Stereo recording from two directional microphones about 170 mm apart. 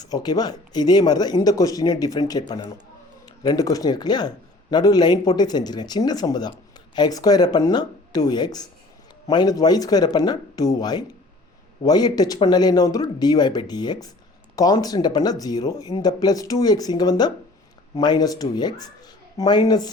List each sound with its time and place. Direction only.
0.0 s speech: 25° left (ahead or behind)